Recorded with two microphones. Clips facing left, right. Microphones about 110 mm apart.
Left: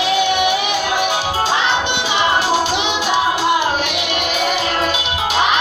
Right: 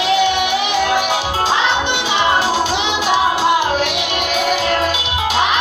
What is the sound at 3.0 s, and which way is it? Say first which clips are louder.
Music: right 3 dB; 20° right (ahead or behind).